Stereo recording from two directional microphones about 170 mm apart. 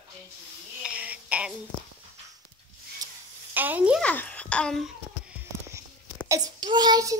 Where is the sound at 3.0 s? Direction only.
20° right (ahead or behind).